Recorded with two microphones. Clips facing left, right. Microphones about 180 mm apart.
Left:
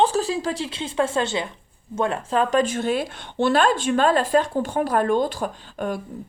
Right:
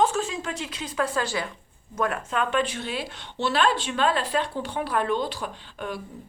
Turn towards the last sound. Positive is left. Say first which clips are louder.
# left 6 dB
turn(degrees=45)  # may be behind; listen again after turning